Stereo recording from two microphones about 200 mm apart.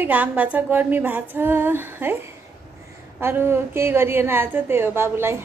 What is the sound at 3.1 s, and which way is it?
A woman's voice, 10° right (ahead or behind).